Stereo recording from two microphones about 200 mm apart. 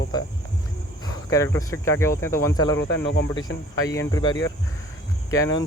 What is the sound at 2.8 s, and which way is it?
Speech, 65° left (ahead or behind).